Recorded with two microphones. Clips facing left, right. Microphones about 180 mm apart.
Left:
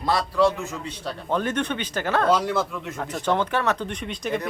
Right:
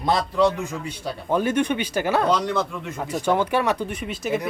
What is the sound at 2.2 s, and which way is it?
Speech, 5° left (ahead or behind).